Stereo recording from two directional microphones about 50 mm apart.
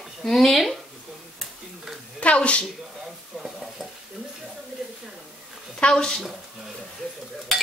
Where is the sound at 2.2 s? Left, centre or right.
Left.